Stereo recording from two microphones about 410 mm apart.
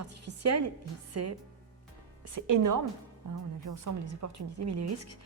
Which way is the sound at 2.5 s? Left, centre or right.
Right.